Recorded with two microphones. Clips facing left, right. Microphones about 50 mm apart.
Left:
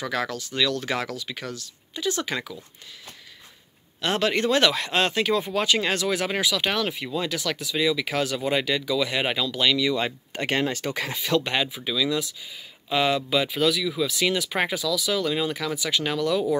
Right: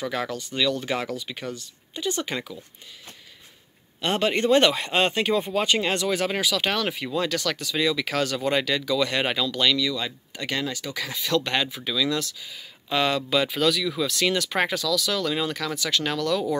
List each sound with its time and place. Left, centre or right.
0.0 s speech: centre
4.0 s speech: centre
9.8 s speech: left